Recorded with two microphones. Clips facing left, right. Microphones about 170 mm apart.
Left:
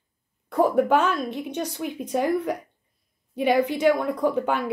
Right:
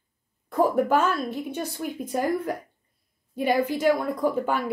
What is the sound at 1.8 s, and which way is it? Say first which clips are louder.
A woman's voice: left 2 dB; centre (ahead or behind).